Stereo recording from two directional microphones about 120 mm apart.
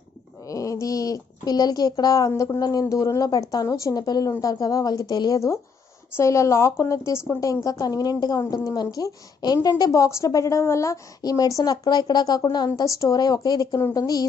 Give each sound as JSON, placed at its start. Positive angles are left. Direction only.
{"t": 0.5, "sound": "a woman's voice", "side_deg": 30}